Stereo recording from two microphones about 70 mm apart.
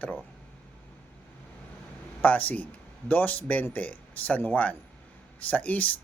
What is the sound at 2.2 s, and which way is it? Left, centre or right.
Speech, left.